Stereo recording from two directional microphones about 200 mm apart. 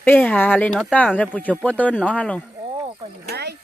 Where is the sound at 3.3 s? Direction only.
55° right (ahead or behind).